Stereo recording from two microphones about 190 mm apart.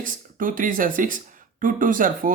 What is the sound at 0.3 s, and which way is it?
Speech, 45° right (ahead or behind).